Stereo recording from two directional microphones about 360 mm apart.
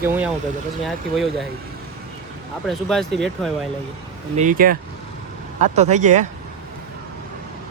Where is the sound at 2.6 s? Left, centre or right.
Centre.